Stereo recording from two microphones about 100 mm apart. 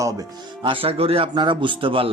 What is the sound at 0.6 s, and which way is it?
A man's voice, 65° right (ahead or behind).